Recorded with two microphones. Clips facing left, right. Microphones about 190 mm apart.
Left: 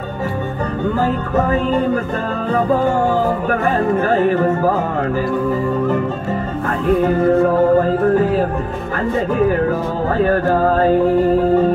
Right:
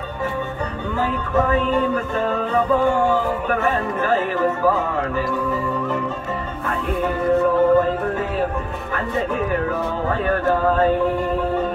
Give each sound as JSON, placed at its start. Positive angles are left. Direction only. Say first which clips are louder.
{"t": 1.0, "sound": "speech", "louder": "right 1 dB", "side_deg": 40}
{"t": 7.0, "sound": "speech", "louder": "left 3 dB", "side_deg": 40}
{"t": 9.5, "sound": "speech", "louder": "left 5 dB", "side_deg": 40}